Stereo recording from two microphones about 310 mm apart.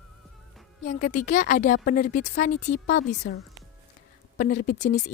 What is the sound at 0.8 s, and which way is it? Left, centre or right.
Speech, left.